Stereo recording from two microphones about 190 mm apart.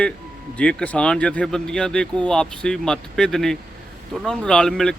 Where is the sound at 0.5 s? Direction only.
5° left (ahead or behind).